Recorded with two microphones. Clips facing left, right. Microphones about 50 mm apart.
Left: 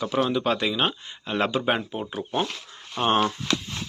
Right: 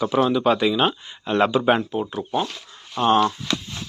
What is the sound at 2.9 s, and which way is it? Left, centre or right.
Speech, left.